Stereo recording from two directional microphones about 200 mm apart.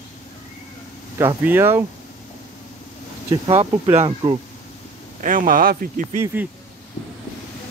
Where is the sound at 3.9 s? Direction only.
25° right (ahead or behind).